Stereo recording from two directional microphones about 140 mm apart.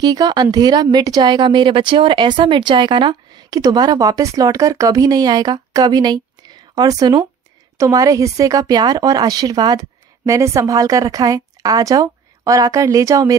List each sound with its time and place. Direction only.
0.0 s a woman's voice: 30° right (ahead or behind)